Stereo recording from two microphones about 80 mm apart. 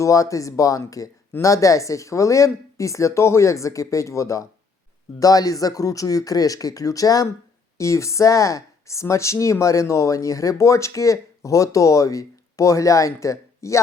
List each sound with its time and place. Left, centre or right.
0.0 s speech: left